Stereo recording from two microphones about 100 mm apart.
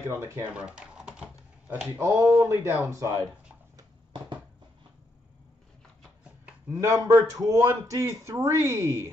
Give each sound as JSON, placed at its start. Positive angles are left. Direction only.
{"t": 0.2, "sound": "speech", "side_deg": -25}
{"t": 0.6, "sound": "typing", "side_deg": -10}
{"t": 2.0, "sound": "a man's voice", "side_deg": -30}
{"t": 6.7, "sound": "a man's voice", "side_deg": -35}